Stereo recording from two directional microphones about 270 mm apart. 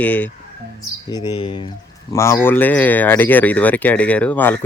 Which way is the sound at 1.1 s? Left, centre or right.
Centre.